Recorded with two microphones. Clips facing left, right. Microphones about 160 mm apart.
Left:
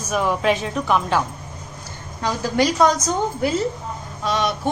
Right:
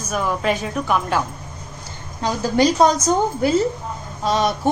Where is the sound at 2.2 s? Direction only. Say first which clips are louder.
Right 2 dB; 25° right (ahead or behind).